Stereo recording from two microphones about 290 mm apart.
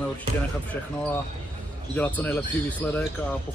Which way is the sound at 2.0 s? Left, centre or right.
Centre.